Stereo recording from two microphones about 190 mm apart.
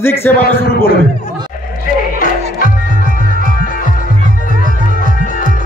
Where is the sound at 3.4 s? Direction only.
45° left (ahead or behind).